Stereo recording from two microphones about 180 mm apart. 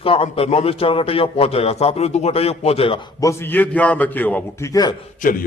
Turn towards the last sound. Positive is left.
turn(degrees=50)  # may be behind; listen again after turning